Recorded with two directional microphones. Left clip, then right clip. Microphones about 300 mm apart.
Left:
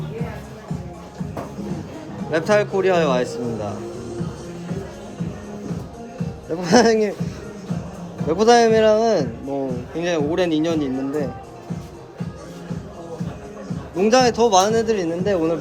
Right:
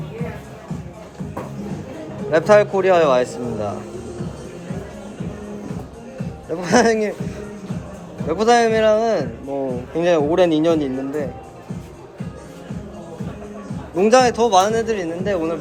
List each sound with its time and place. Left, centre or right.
2.3 s speech: centre
6.5 s speech: centre
8.3 s speech: centre
13.9 s speech: centre